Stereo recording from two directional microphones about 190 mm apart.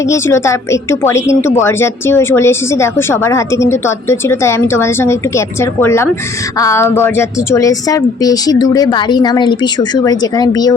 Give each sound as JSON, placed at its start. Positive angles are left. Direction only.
{"t": 0.0, "sound": "a woman's voice", "side_deg": 15}